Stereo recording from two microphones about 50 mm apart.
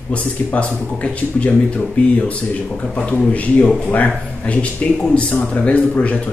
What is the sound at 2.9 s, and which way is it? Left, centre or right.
Speech, left.